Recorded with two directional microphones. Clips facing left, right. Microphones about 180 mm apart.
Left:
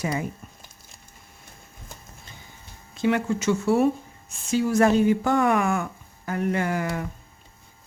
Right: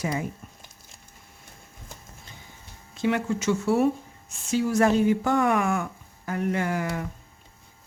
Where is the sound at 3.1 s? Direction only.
55° left (ahead or behind).